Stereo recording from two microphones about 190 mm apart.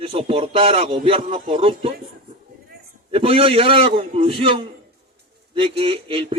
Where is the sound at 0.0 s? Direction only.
30° right (ahead or behind).